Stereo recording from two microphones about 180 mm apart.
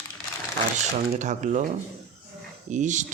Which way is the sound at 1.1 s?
40° right (ahead or behind).